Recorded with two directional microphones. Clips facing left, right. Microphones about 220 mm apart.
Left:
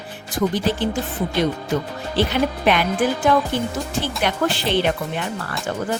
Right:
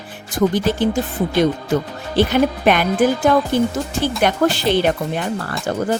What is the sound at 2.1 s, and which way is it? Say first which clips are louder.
Speech: right 5 dB; 45° right (ahead or behind).